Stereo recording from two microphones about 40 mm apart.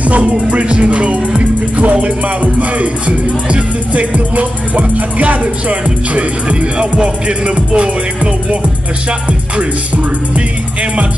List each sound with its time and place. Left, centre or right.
0.0 s music: right
10.3 s music: right